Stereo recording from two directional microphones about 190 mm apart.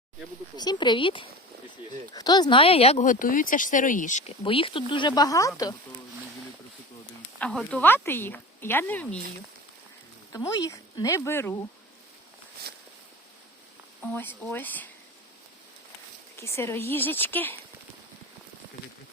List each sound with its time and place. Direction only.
0.5 s speech: 20° left (ahead or behind); by 4.2 s 45° left (ahead or behind)
4.4 s speech: 25° left (ahead or behind)
7.3 s speech: 5° left (ahead or behind)
10.3 s speech: 15° left (ahead or behind)
12.7 s a sound: 60° right (ahead or behind)
14.0 s speech: 10° left (ahead or behind)
16.4 s speech: 15° left (ahead or behind)